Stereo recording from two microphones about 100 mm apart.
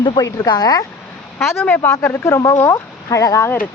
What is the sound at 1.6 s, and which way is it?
Speech, 20° left (ahead or behind).